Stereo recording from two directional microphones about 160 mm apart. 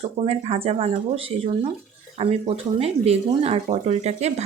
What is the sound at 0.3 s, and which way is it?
Speech, 40° right (ahead or behind).